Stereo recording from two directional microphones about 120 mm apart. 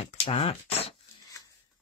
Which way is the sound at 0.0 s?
60° left (ahead or behind).